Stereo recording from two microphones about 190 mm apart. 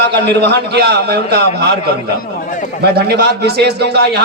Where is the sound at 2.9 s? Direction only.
60° right (ahead or behind).